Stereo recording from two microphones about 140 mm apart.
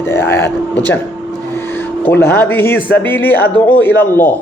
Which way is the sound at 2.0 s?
15° left (ahead or behind).